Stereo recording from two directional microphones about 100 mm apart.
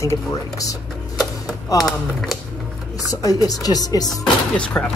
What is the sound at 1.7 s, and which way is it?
Speech, centre (ahead or behind).